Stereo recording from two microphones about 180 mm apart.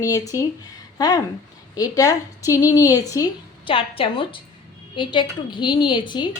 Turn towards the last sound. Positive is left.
turn(degrees=25)  # may be behind; listen again after turning